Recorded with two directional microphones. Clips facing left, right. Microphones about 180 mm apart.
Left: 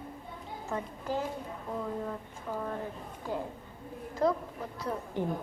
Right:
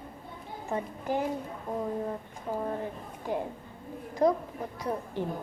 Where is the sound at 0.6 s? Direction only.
15° right (ahead or behind).